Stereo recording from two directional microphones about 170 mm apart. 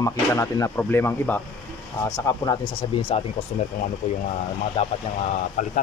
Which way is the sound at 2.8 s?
35° left (ahead or behind).